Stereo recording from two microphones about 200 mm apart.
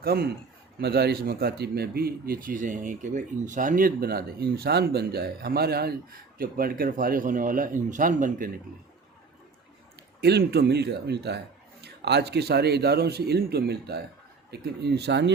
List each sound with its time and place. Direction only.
0.0 s speech: 50° right (ahead or behind)
10.2 s speech: 55° right (ahead or behind)